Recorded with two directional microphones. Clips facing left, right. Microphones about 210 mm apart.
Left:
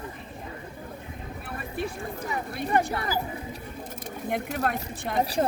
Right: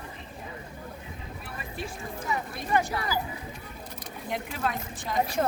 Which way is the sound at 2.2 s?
35° left (ahead or behind).